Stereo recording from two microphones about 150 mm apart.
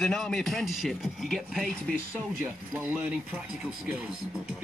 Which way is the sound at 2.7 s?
10° right (ahead or behind).